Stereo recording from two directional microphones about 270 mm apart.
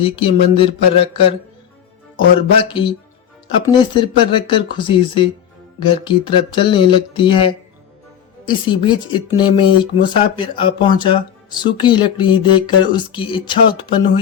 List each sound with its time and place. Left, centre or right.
0.0 s speech: centre
2.6 s speech: centre